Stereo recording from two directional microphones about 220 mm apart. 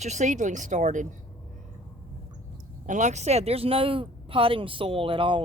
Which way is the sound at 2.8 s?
35° right (ahead or behind).